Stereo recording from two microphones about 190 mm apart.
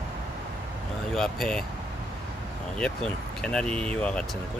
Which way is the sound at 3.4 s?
5° left (ahead or behind).